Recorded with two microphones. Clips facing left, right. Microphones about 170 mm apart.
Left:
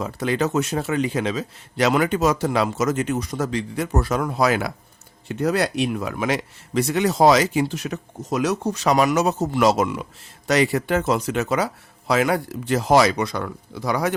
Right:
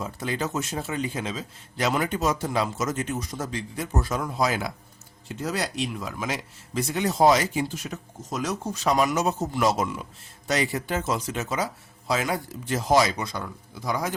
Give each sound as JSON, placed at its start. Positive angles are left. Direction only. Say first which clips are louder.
{"t": 0.0, "sound": "a man's voice", "louder": "left 7 dB", "side_deg": 70}